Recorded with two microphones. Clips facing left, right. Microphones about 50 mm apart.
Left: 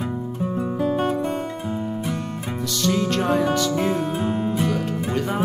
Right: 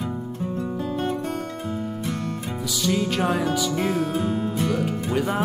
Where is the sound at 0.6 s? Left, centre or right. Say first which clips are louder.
Left 6 dB; centre.